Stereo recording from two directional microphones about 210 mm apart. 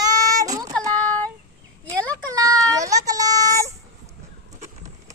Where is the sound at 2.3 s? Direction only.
15° right (ahead or behind).